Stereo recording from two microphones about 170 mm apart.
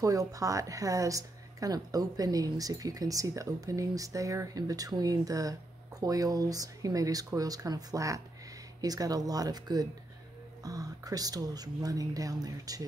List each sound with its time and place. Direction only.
0.0 s speech: 20° right (ahead or behind)